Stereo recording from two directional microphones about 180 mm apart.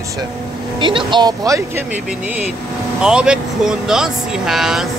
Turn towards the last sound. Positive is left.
turn(degrees=0)  # may be behind; listen again after turning